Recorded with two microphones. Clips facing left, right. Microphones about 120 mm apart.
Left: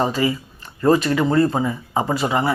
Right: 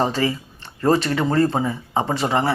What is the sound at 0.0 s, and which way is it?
Speech, 30° right (ahead or behind).